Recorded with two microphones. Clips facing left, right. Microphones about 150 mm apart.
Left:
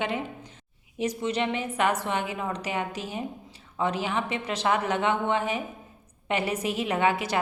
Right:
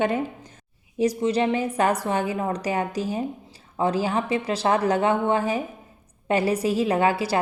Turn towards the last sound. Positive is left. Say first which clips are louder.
# right 4 dB
turn(degrees=-35)  # may be behind; listen again after turning